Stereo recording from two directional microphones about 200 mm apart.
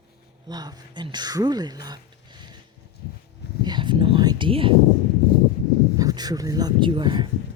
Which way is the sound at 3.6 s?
20° right (ahead or behind).